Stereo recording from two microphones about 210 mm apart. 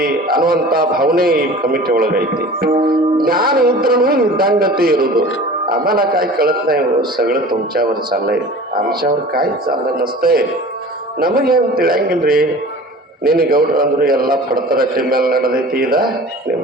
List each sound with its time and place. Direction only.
0.0 s a man's voice: 45° right (ahead or behind)